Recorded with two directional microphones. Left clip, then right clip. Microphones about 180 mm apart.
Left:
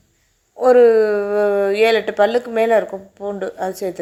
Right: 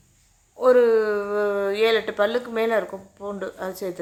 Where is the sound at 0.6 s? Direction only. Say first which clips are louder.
Left 6 dB; 15° left (ahead or behind).